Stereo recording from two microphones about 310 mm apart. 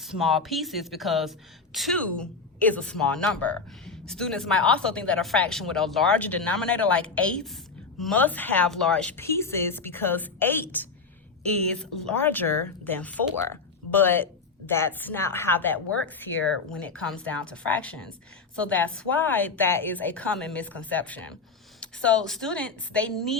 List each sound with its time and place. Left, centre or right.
0.0 s a woman's voice: centre
16.0 s speech: left
16.6 s speech: centre